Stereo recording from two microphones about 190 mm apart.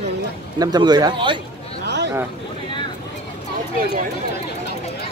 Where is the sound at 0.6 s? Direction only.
20° right (ahead or behind).